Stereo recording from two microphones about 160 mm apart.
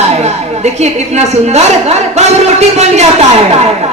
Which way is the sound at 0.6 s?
45° right (ahead or behind).